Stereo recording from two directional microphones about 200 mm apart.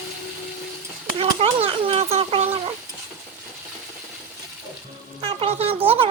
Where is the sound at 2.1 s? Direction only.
30° right (ahead or behind).